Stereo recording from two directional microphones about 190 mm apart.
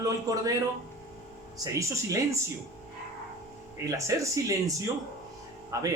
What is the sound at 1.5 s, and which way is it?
Speech, 15° right (ahead or behind).